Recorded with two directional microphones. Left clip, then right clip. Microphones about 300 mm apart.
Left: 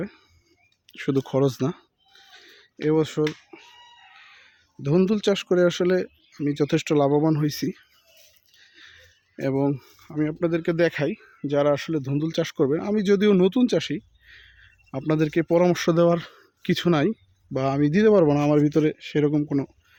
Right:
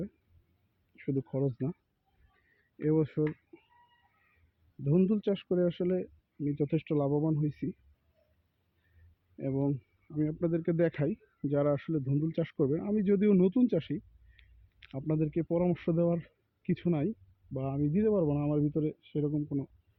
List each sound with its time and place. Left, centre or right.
0.9 s speech: left
2.8 s speech: centre
4.8 s speech: centre
9.4 s speech: left
10.2 s speech: centre
14.9 s speech: left